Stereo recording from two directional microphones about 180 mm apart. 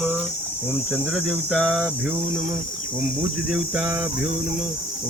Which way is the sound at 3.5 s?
5° right (ahead or behind).